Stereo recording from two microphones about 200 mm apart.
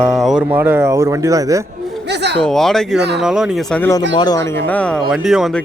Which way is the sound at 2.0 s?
55° right (ahead or behind).